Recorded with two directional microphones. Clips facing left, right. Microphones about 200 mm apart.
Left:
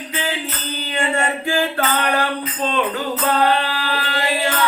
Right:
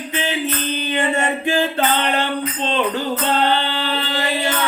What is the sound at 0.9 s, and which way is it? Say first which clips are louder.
Mantra: even; 20° right (ahead or behind).